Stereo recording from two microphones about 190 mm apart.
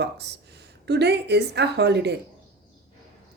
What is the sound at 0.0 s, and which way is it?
Speech, 60° right (ahead or behind).